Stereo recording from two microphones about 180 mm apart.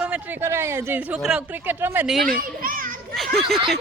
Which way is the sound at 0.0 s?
10° right (ahead or behind).